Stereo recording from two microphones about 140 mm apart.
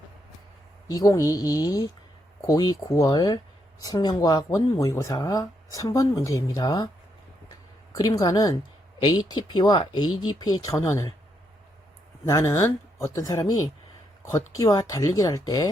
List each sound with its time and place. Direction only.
0.9 s speech: 25° left (ahead or behind)
7.9 s speech: 30° left (ahead or behind)
12.2 s speech: 20° left (ahead or behind)